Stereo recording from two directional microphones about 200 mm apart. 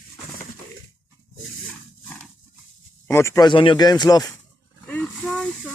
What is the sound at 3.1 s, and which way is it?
Speech, 15° left (ahead or behind).